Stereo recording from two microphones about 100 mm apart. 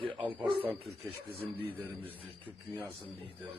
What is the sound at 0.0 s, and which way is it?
Speech, 55° right (ahead or behind).